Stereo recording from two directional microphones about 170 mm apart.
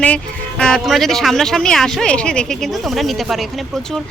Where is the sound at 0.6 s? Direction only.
5° left (ahead or behind).